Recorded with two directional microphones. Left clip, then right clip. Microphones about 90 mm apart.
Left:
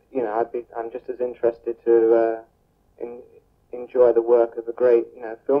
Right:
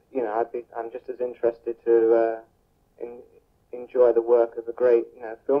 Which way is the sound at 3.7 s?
35° right (ahead or behind).